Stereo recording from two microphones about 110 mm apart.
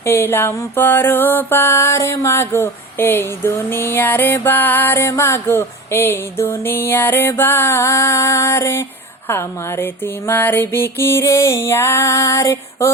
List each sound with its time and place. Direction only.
0.0 s mantra: 20° left (ahead or behind)